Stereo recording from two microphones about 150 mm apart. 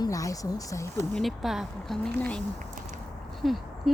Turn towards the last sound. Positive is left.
turn(degrees=0)  # may be behind; listen again after turning